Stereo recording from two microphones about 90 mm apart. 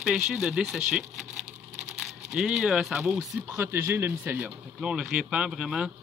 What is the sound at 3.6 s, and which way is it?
Speech, 25° right (ahead or behind).